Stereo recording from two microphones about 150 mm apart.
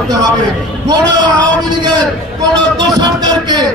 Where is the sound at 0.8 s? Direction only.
30° right (ahead or behind).